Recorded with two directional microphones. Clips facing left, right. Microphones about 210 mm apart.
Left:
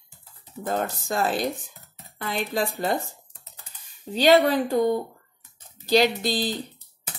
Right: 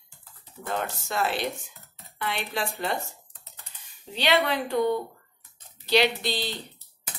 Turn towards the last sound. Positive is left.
turn(degrees=45)  # may be behind; listen again after turning